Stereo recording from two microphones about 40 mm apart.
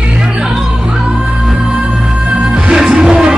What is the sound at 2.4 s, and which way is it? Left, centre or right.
Music, centre.